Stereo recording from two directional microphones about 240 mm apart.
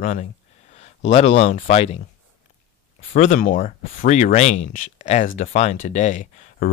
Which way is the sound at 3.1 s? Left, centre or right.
Left.